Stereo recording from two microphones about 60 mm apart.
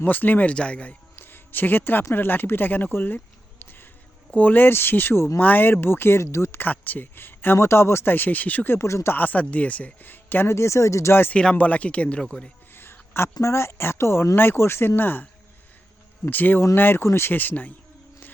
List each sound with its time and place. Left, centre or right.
0.0 s speech: left
1.2 s speech: left
3.6 s a sound: left
4.3 s speech: left
5.4 s speech: left
6.6 s speech: left
8.7 s speech: left
9.1 s speech: left
11.5 s speech: left
12.2 s speech: centre
12.7 s a sound: left
13.4 s speech: left
16.3 s speech: left